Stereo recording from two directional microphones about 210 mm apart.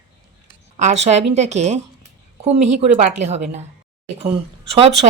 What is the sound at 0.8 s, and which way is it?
A woman's voice, 30° right (ahead or behind).